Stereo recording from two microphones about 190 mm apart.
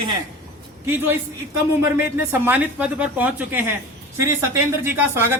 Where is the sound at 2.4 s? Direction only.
10° right (ahead or behind).